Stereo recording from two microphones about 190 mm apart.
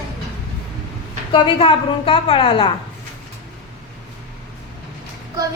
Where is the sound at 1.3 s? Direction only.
25° left (ahead or behind).